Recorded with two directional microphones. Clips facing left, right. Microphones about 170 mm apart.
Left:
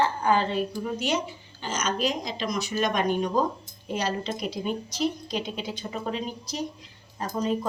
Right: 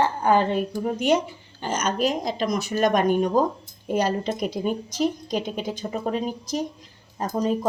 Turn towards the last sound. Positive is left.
turn(degrees=-45)  # may be behind; listen again after turning